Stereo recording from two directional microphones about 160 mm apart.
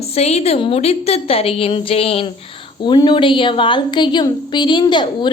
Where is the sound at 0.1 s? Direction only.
40° left (ahead or behind).